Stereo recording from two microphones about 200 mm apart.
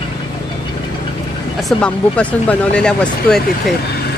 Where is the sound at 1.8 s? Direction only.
5° left (ahead or behind).